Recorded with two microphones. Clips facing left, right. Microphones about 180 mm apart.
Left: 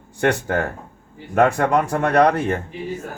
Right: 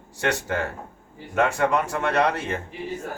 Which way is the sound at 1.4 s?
60° left (ahead or behind).